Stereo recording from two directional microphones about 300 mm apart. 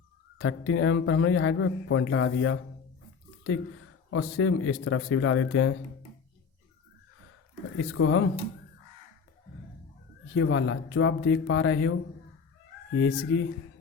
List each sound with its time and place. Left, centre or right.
0.3 s speech: left
4.1 s speech: left
7.8 s speech: left
10.3 s speech: left